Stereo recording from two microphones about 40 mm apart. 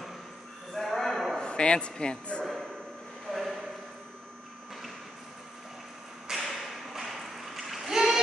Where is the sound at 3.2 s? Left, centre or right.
Centre.